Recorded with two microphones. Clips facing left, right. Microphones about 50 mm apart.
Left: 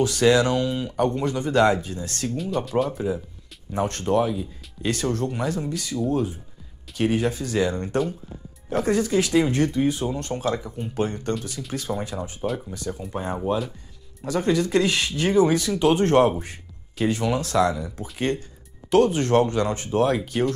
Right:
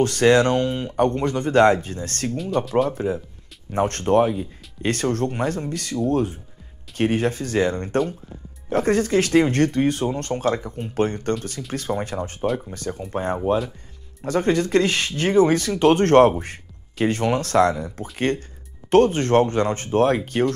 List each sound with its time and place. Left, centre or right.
0.0 s speech: right
2.3 s speech: centre
3.7 s speech: right
11.6 s speech: centre
12.7 s speech: right